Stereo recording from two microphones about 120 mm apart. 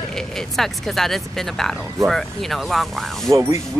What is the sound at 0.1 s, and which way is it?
Speech, 5° left (ahead or behind).